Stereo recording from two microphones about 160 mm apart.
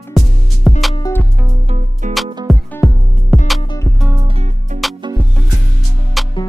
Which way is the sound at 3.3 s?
Centre (ahead or behind).